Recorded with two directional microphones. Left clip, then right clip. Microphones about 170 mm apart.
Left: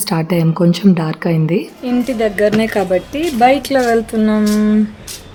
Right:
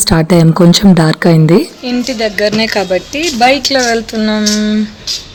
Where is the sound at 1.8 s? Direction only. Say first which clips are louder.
Right 2 dB; 10° left (ahead or behind).